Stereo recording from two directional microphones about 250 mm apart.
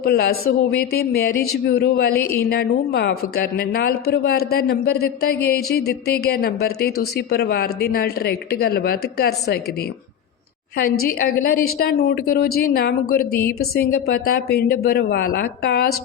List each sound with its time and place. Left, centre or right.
0.0 s a woman's voice: left
11.0 s a woman's voice: left